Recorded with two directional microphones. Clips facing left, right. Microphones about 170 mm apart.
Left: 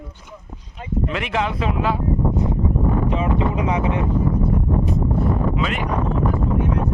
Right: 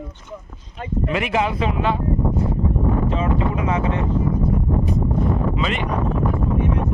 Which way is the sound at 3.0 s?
15° left (ahead or behind).